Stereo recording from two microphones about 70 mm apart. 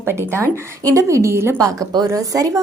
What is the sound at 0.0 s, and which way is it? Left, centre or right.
A woman's voice, right.